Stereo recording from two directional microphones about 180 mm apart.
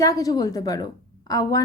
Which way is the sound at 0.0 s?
20° left (ahead or behind).